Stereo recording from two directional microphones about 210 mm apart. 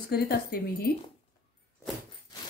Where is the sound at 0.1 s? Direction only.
45° left (ahead or behind).